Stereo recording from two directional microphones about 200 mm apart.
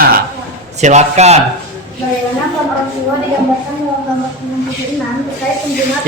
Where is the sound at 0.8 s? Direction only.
35° right (ahead or behind).